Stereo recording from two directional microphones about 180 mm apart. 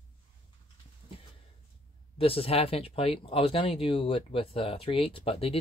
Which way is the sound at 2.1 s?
30° left (ahead or behind).